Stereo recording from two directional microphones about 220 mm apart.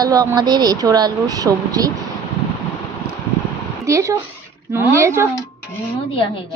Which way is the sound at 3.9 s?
15° right (ahead or behind).